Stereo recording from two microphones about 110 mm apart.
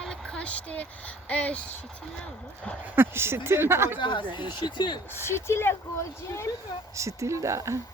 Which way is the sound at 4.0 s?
45° left (ahead or behind).